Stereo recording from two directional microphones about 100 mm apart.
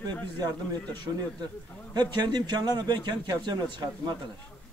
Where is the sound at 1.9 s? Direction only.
45° right (ahead or behind).